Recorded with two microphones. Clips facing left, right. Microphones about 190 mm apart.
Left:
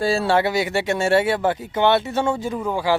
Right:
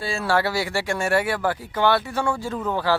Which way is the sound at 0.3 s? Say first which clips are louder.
Left 3 dB; 20° left (ahead or behind).